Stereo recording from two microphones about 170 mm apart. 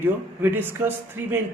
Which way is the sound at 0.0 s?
10° right (ahead or behind).